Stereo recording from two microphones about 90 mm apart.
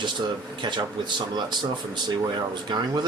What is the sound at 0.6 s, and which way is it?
Speech, 60° right (ahead or behind).